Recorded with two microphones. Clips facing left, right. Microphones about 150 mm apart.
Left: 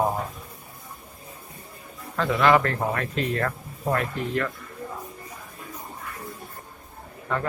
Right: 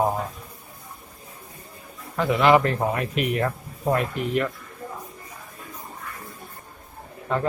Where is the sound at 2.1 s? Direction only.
20° right (ahead or behind).